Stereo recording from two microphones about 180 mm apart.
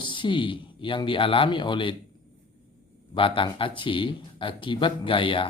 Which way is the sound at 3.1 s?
30° left (ahead or behind).